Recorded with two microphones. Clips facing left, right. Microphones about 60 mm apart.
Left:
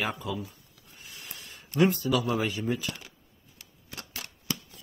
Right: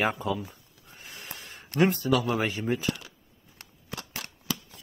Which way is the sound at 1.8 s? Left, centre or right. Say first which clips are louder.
Right 3 dB; right.